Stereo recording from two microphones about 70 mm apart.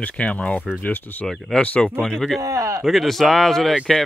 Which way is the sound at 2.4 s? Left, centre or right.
Right.